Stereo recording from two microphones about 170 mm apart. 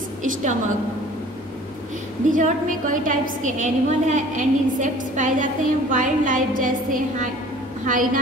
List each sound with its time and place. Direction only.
0.2 s a woman's voice: 45° right (ahead or behind)
2.3 s a woman's voice: 50° right (ahead or behind)